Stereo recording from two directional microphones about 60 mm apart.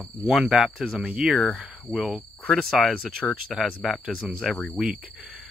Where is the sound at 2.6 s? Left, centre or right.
Centre.